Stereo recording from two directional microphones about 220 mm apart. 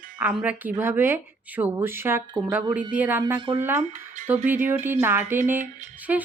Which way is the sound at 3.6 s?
10° right (ahead or behind).